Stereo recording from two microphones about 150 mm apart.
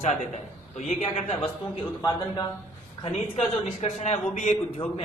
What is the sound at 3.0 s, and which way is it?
A man's voice, 45° left (ahead or behind).